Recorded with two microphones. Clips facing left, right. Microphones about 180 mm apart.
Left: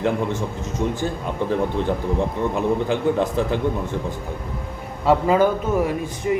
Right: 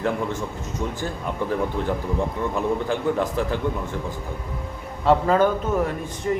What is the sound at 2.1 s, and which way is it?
A man's voice, 20° left (ahead or behind).